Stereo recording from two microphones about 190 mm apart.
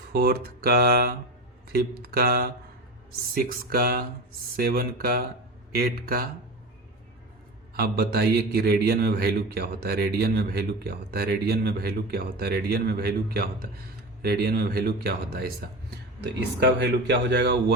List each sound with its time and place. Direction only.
0.1 s speech: 50° right (ahead or behind)
7.8 s a man's voice: 55° right (ahead or behind)
16.6 s a man's voice: 65° right (ahead or behind)